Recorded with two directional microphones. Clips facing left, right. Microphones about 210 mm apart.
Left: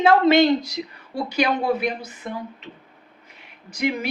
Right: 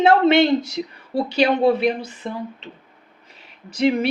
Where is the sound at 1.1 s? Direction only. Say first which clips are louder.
Right 4 dB; 30° right (ahead or behind).